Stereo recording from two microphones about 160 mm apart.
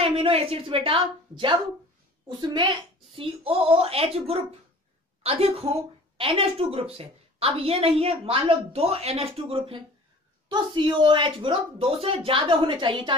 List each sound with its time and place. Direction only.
0.0 s a woman's voice: 35° right (ahead or behind)